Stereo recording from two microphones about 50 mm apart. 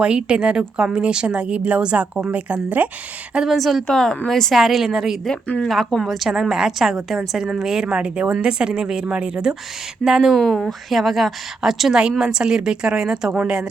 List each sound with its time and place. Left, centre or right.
0.0 s a woman's voice: right
2.3 s a woman's voice: right
3.4 s a woman's voice: centre
4.9 s a woman's voice: centre
5.6 s a woman's voice: centre
6.5 s a woman's voice: centre
10.3 s a woman's voice: centre